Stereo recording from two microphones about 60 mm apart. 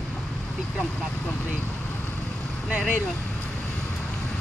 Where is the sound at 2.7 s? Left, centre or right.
Centre.